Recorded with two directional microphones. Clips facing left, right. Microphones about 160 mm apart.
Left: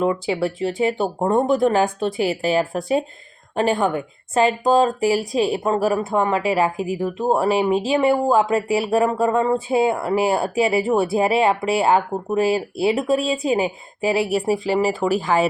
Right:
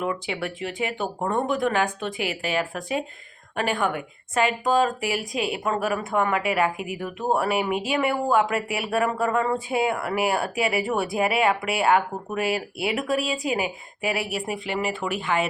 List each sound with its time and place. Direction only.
0.0 s speech: 30° left (ahead or behind)